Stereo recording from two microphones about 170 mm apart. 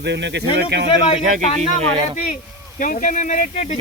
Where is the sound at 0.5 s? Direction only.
85° right.